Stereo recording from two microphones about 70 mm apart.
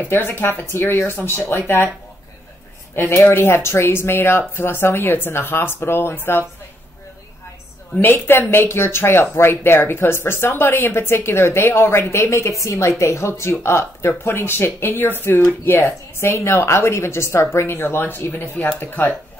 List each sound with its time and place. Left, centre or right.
0.0 s speech: left
3.0 s speech: left
8.0 s speech: left